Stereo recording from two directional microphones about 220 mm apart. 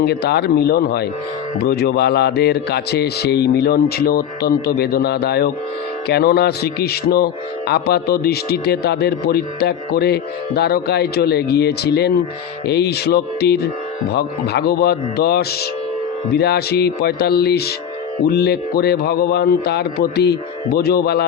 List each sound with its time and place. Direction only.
0.0 s a man's voice: 50° left (ahead or behind)